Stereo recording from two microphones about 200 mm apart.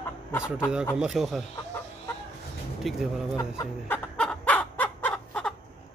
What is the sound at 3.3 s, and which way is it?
Speech, 15° left (ahead or behind).